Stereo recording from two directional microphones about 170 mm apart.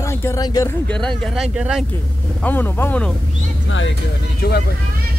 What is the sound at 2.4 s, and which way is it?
Speech, 10° left (ahead or behind).